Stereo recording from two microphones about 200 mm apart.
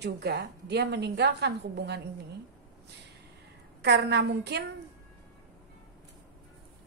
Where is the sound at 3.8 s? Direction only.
60° right (ahead or behind).